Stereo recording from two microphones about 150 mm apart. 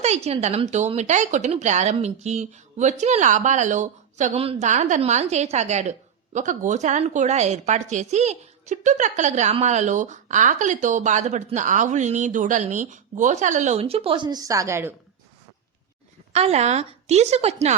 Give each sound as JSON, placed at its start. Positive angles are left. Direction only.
{"t": 0.0, "sound": "a woman's voice", "side_deg": -45}
{"t": 16.3, "sound": "a woman's voice", "side_deg": -45}